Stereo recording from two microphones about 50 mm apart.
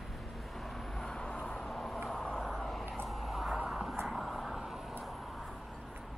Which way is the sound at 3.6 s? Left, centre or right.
Centre.